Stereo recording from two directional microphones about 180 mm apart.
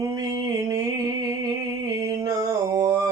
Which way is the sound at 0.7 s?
20° right (ahead or behind).